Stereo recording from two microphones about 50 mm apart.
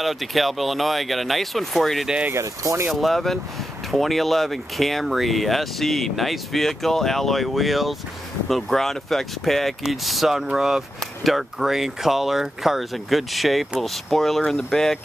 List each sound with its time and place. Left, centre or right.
0.0 s speech: centre
2.3 s speech: right
2.9 s speech: centre